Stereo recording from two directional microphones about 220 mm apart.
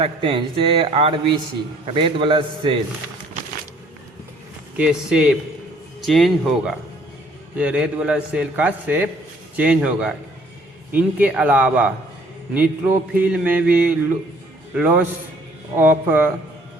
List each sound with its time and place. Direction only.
0.0 s a man's voice: 25° right (ahead or behind)
4.8 s a man's voice: 5° right (ahead or behind)
10.9 s mantra: 5° right (ahead or behind)